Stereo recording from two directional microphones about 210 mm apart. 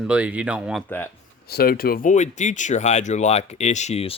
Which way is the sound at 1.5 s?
45° left (ahead or behind).